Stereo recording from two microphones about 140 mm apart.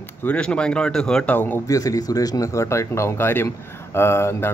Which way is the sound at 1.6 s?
25° left (ahead or behind).